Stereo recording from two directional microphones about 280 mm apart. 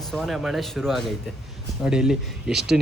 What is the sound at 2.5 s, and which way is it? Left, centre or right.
Speech, right.